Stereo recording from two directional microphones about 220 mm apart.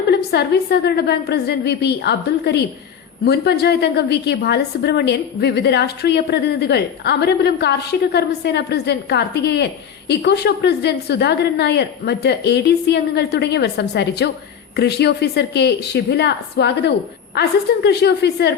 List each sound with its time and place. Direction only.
0.1 s a woman's voice: 45° left (ahead or behind)